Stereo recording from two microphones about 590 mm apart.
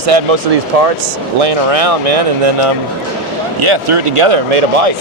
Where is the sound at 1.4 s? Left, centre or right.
Right.